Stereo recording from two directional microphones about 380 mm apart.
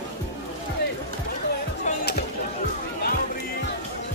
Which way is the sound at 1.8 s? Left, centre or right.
Centre.